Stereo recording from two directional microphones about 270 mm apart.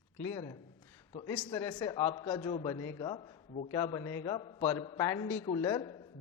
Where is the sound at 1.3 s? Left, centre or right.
Centre.